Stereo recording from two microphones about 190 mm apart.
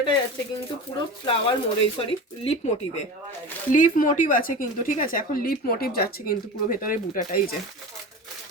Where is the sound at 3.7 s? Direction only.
45° left (ahead or behind).